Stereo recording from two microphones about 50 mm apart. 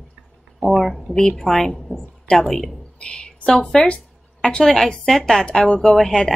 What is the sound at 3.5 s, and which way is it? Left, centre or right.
A woman's voice, centre.